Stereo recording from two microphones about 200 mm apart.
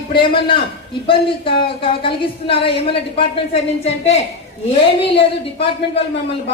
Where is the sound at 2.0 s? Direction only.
25° left (ahead or behind).